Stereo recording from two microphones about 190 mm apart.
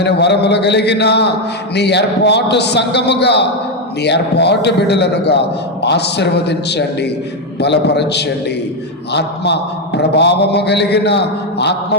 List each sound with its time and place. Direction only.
0.0 s a man's voice: 60° left (ahead or behind)